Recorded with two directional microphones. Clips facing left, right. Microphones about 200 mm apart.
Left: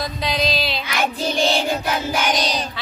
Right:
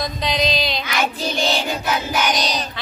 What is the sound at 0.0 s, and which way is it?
Music, 5° left (ahead or behind).